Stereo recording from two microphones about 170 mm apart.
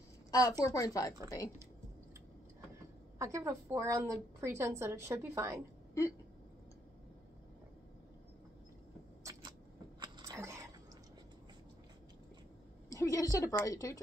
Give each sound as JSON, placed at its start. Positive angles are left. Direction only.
{"t": 0.3, "sound": "a woman's voice", "side_deg": 20}
{"t": 3.2, "sound": "a woman's voice", "side_deg": -15}
{"t": 9.2, "sound": "vehicle", "side_deg": -20}
{"t": 9.9, "sound": "a sound", "side_deg": -25}
{"t": 12.9, "sound": "a woman's voice", "side_deg": 20}